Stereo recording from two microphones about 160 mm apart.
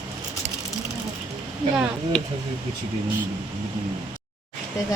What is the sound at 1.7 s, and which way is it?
Speech, 5° left (ahead or behind).